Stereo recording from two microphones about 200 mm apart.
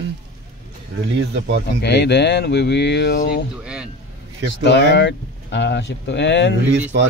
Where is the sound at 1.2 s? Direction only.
60° right (ahead or behind).